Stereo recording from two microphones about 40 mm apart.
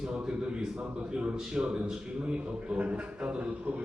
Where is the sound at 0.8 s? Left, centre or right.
Right.